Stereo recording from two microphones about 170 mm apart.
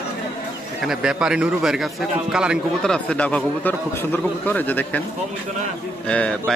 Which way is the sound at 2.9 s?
5° left (ahead or behind).